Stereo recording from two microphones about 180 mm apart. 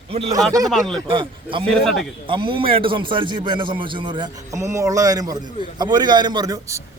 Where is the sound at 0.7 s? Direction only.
Centre (ahead or behind).